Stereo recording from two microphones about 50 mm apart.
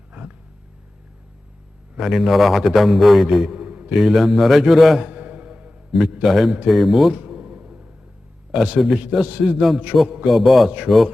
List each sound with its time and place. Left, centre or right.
0.1 s roaring cats: right
2.0 s a man's voice: centre
3.5 s a sound: right
3.9 s a man's voice: centre
5.0 s music: right
6.2 s a man's voice: centre
7.2 s a sound: right
8.5 s a man's voice: centre
9.9 s a man's voice: centre
10.2 s a man's voice: centre